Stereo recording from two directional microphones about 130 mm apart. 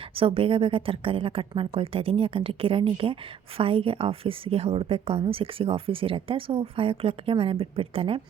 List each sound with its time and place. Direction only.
0.2 s a woman's voice: 45° right (ahead or behind)